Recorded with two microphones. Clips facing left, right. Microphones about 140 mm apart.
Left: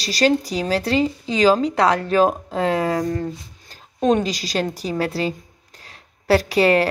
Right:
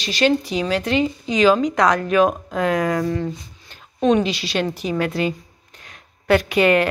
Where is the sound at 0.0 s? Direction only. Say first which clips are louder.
Even; 35° left (ahead or behind).